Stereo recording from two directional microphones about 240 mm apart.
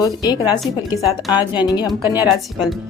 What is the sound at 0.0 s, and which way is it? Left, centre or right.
Speech, centre.